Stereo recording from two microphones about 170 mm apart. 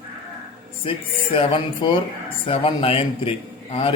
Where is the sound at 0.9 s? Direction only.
30° left (ahead or behind).